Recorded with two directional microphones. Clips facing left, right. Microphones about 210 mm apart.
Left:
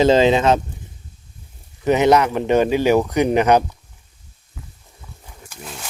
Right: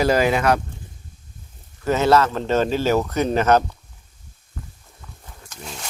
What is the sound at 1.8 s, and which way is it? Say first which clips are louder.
Speech: left 3 dB; 15° left (ahead or behind).